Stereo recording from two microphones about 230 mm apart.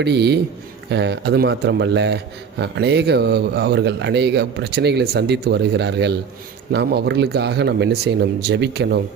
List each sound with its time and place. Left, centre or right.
0.0 s speech: right